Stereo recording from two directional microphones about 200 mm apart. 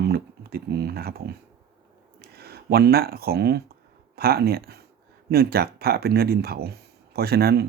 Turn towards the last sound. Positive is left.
turn(degrees=-55)  # may be behind; listen again after turning